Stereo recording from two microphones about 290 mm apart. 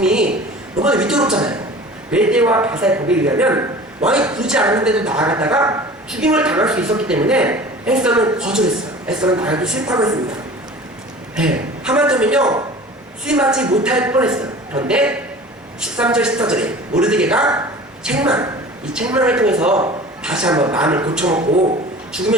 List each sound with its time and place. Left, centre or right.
0.0 s a man's voice: centre
11.3 s a man's voice: centre
21.4 s speech: right